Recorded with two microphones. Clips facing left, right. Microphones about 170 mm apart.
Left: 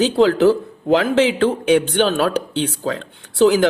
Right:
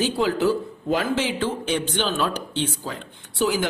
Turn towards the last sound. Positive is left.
turn(degrees=75)  # may be behind; listen again after turning